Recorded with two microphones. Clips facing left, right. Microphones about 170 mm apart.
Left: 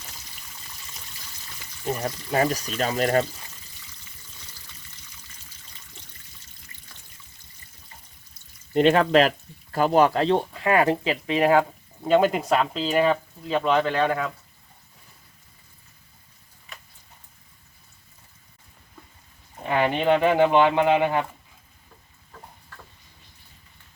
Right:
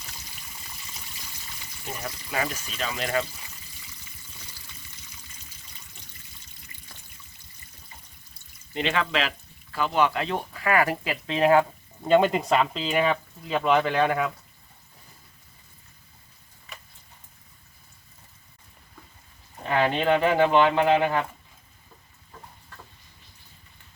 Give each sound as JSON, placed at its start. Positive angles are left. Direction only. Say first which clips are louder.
{"t": 1.9, "sound": "speech", "louder": "left 7 dB", "side_deg": 40}
{"t": 8.7, "sound": "speech", "louder": "left 9 dB", "side_deg": 45}
{"t": 12.0, "sound": "speech", "louder": "even", "side_deg": 5}
{"t": 19.6, "sound": "speech", "louder": "left 1 dB", "side_deg": 15}